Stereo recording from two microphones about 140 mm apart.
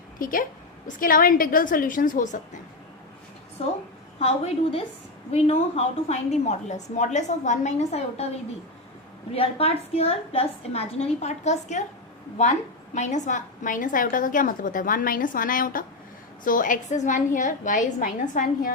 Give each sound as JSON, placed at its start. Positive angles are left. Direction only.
{"t": 0.2, "sound": "a woman's voice", "side_deg": 80}
{"t": 4.2, "sound": "a woman's voice", "side_deg": 45}
{"t": 9.3, "sound": "a woman's voice", "side_deg": 45}